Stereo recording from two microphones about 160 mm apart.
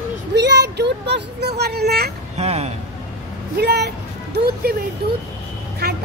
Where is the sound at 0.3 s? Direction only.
90° right.